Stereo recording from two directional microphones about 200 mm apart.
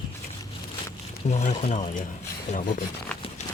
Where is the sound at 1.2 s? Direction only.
35° left (ahead or behind).